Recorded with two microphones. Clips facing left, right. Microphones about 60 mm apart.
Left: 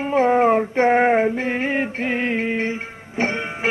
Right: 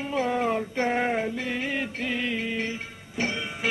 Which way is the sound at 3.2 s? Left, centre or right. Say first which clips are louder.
Left 7 dB; left.